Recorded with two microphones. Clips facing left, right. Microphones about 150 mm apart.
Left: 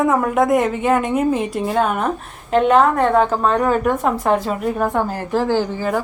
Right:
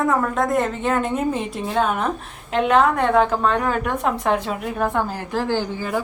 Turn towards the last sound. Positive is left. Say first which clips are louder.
# left 4 dB
turn(degrees=5)  # may be behind; listen again after turning